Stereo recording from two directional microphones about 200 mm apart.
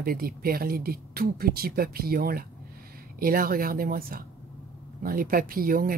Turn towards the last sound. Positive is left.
turn(degrees=-45)  # may be behind; listen again after turning